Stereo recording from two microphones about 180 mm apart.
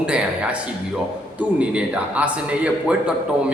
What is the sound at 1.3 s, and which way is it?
A man's voice, 5° right (ahead or behind).